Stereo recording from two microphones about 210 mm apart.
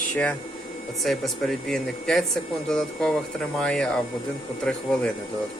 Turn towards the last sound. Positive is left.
turn(degrees=5)  # may be behind; listen again after turning